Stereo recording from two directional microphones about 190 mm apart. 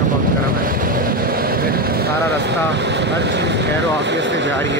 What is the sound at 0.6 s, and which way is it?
Vehicle, 50° right (ahead or behind).